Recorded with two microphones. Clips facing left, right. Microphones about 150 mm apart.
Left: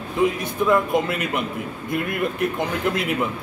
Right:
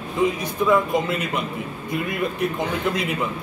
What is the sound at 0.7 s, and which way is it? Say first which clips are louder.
A man's voice: even; centre (ahead or behind).